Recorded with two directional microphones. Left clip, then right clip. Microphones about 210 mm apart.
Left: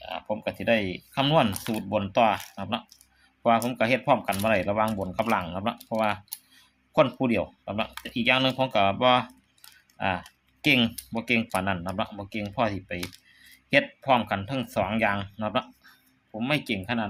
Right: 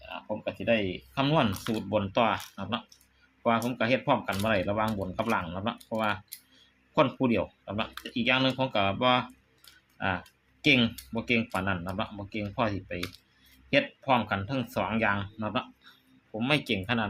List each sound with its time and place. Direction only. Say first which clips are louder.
0.0 s speech: left 4 dB; 20° left (ahead or behind)
6.9 s speech: left 3 dB; 10° left (ahead or behind)
16.4 s speech: even; centre (ahead or behind)